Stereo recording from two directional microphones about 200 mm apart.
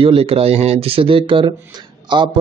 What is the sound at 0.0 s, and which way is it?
Speech, 30° right (ahead or behind).